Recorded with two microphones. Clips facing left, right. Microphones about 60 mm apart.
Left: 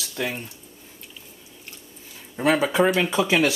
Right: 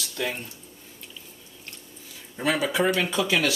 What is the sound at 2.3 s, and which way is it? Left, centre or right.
Speech, left.